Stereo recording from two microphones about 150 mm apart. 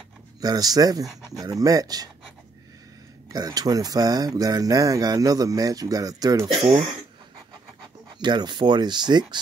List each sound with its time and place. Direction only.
0.4 s speech: 25° right (ahead or behind)
3.3 s speech: 25° right (ahead or behind)
8.2 s speech: 30° right (ahead or behind)